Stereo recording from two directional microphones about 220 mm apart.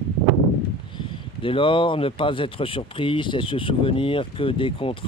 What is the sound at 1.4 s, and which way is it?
Speech, 25° left (ahead or behind).